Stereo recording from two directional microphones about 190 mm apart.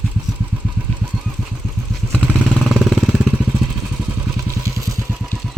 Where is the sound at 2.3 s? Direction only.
Centre (ahead or behind); by 5.3 s 15° right (ahead or behind).